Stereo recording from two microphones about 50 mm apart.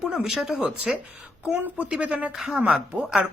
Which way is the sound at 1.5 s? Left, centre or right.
Right.